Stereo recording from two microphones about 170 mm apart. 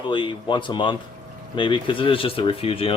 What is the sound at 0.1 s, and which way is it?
Speech, 30° left (ahead or behind).